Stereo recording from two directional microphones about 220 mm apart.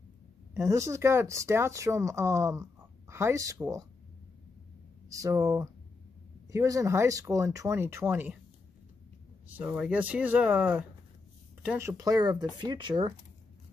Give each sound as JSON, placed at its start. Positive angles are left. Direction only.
{"t": 0.6, "sound": "speech", "side_deg": -15}
{"t": 5.1, "sound": "speech", "side_deg": -15}
{"t": 9.5, "sound": "speech", "side_deg": -10}